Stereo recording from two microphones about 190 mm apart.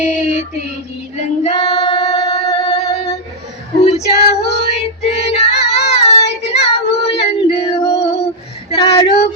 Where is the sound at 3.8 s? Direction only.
35° left (ahead or behind).